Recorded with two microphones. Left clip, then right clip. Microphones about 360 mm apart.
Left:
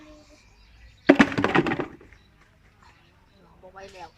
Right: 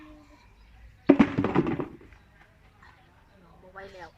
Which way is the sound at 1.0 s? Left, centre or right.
Left.